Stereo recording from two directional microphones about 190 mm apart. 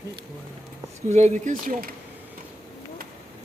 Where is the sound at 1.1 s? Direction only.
35° right (ahead or behind).